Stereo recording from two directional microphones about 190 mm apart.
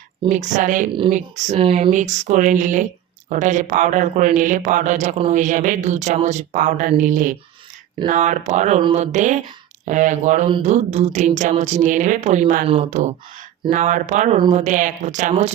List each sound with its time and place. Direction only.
0.3 s speech: 40° right (ahead or behind)
8.8 s speech: 25° right (ahead or behind)
9.1 s speech: 40° right (ahead or behind)